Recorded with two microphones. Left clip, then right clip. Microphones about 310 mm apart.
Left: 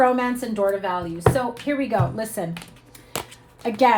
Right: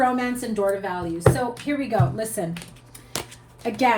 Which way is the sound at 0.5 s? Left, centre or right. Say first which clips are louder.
Left 1 dB; left.